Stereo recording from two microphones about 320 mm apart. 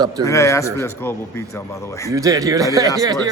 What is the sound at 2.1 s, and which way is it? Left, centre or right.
Speech, centre.